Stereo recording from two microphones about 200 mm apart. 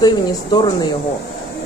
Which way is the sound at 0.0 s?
20° left (ahead or behind).